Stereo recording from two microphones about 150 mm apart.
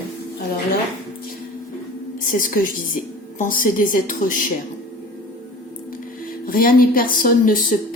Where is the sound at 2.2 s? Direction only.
65° left (ahead or behind).